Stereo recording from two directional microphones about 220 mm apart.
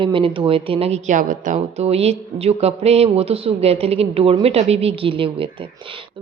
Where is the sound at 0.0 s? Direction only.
25° right (ahead or behind).